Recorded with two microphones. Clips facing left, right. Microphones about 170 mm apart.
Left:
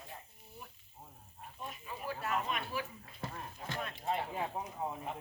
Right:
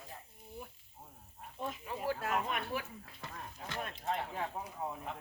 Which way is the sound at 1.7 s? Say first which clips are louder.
Right 5 dB; 80° right.